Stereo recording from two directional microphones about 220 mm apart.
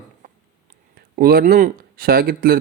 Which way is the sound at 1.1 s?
45° right (ahead or behind).